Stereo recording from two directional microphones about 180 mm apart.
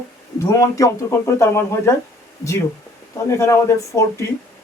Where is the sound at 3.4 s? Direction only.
15° left (ahead or behind).